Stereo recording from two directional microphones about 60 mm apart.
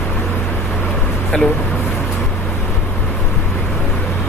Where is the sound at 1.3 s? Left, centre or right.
Centre.